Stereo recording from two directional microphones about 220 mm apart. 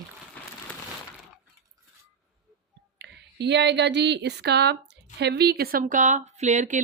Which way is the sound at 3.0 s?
50° right (ahead or behind).